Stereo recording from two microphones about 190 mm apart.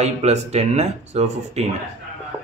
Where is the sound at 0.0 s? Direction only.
35° right (ahead or behind).